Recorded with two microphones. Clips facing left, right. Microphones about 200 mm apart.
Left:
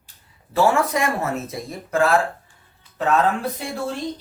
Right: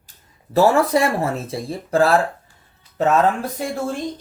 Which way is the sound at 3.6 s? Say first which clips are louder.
Right 5 dB; 45° right (ahead or behind).